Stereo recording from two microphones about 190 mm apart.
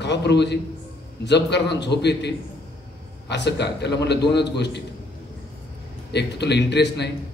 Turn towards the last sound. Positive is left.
turn(degrees=65)  # may be behind; listen again after turning